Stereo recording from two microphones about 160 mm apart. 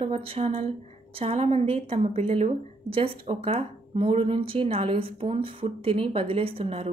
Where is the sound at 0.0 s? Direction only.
35° right (ahead or behind).